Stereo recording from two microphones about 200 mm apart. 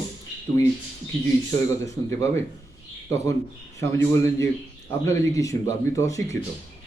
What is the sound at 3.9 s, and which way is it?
Speech, 15° left (ahead or behind).